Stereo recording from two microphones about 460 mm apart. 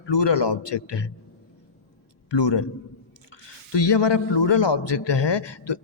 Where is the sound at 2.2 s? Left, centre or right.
Left.